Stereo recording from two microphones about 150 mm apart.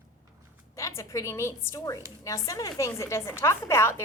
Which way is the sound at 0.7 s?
20° left (ahead or behind).